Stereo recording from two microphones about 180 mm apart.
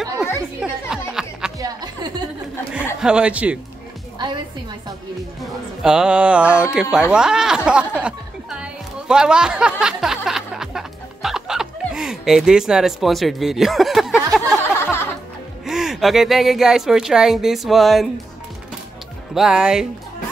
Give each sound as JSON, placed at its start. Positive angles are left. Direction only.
{"t": 0.6, "sound": "music", "side_deg": -5}
{"t": 1.6, "sound": "music", "side_deg": -20}
{"t": 3.0, "sound": "speech", "side_deg": -5}
{"t": 5.4, "sound": "speech", "side_deg": -5}
{"t": 14.7, "sound": "music", "side_deg": 15}
{"t": 15.6, "sound": "speech", "side_deg": 0}
{"t": 19.3, "sound": "speech", "side_deg": -5}